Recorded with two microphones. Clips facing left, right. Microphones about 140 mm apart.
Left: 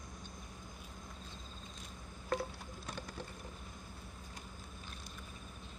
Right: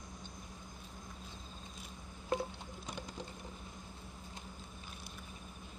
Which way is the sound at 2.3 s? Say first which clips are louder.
Right 1 dB; 15° right (ahead or behind).